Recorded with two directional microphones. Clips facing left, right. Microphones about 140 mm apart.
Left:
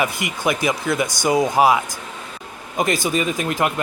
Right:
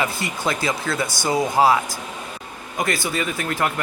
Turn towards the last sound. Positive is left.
turn(degrees=20)  # may be behind; listen again after turning